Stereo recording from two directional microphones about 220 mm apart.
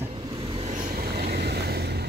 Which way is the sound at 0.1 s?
20° right (ahead or behind).